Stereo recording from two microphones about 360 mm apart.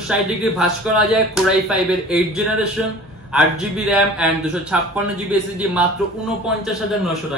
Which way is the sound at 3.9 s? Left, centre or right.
Centre.